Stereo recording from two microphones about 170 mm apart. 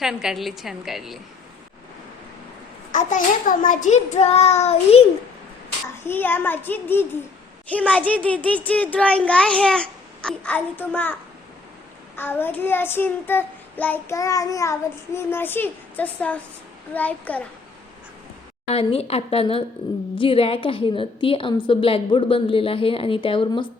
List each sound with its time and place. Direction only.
0.0 s a woman's voice: 5° right (ahead or behind)
2.9 s a child's voice: 50° left (ahead or behind)
6.1 s child singing: 10° left (ahead or behind)
18.7 s a woman's voice: 35° left (ahead or behind)